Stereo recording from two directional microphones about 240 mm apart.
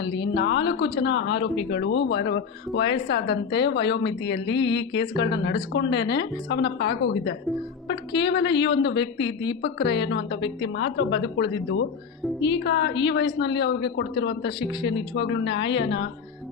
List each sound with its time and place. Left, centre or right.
0.3 s a woman's voice: left
14.6 s speech: centre
15.1 s speech: left